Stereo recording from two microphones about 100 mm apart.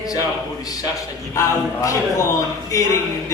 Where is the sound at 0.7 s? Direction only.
35° left (ahead or behind).